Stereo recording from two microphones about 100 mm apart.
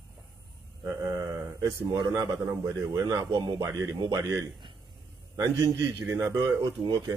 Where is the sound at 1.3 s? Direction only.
30° right (ahead or behind).